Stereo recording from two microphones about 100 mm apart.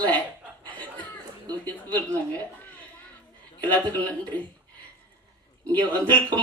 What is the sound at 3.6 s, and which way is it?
Speech, 15° left (ahead or behind).